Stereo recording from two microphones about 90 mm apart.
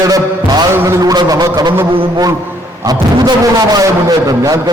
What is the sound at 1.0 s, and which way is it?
Speech, 45° right (ahead or behind).